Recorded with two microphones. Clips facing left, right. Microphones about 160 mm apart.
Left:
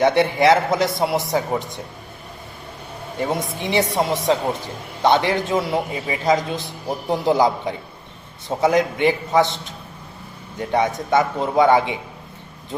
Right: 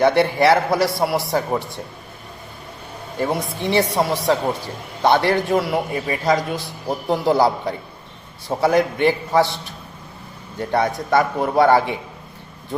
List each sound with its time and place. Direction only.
0.0 s a man's voice: 20° left (ahead or behind)
3.2 s a man's voice: 20° left (ahead or behind)